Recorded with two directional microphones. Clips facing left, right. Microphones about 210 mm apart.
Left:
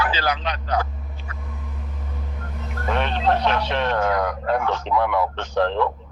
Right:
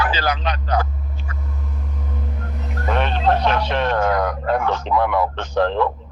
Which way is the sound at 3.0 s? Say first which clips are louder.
Right 2 dB; 45° right (ahead or behind).